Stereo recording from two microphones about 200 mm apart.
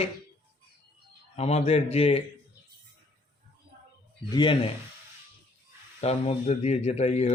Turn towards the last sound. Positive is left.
turn(degrees=30)  # may be behind; listen again after turning